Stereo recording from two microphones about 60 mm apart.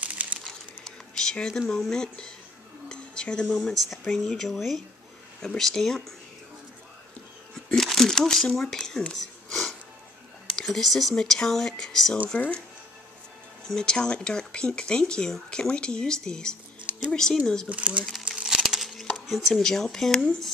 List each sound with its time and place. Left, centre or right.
0.0 s crumpling: right
0.5 s a sound: centre
1.7 s speech: centre
2.9 s a sound: centre
4.1 s speech: centre
7.5 s a sound: centre
10.5 s speech: centre
13.7 s speech: centre
17.6 s speech: right
18.4 s crumpling: centre
19.1 s speech: centre